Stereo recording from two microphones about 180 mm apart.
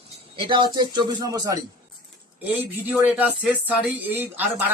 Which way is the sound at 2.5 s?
10° right (ahead or behind).